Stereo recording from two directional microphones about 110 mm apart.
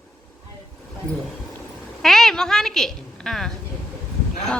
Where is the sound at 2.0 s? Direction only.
5° left (ahead or behind).